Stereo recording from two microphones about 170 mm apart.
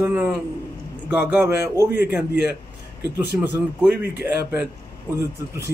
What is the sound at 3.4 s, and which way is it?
A man's voice, 10° right (ahead or behind).